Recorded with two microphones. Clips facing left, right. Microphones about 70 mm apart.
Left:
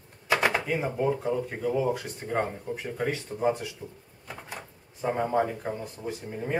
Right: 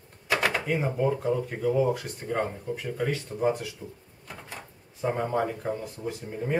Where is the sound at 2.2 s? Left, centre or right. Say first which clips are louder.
Even; centre.